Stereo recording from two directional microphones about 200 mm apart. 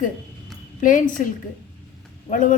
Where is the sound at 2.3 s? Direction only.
40° left (ahead or behind).